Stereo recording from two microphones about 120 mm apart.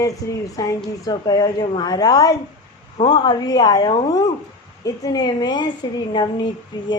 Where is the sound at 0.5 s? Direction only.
30° left (ahead or behind).